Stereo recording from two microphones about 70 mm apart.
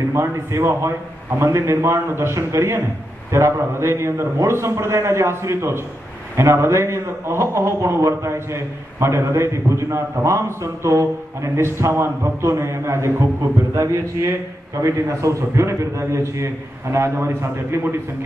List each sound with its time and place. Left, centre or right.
0.1 s a man's voice: right
14.8 s a man's voice: right